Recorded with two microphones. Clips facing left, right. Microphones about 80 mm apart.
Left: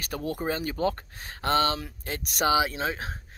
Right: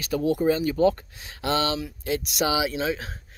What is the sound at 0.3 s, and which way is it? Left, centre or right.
Speech, left.